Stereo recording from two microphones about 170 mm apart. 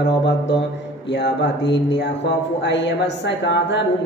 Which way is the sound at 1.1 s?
90° left.